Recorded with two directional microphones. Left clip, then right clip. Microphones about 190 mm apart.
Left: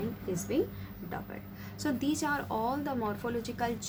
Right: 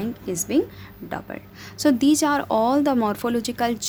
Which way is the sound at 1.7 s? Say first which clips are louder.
Right 14 dB; 50° right (ahead or behind).